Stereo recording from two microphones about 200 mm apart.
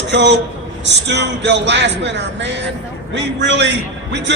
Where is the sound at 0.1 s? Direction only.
60° right (ahead or behind).